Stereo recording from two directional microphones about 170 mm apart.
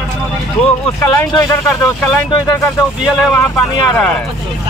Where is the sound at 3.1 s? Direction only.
5° left (ahead or behind).